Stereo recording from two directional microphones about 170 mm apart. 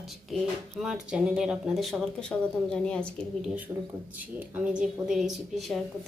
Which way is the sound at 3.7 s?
20° right (ahead or behind).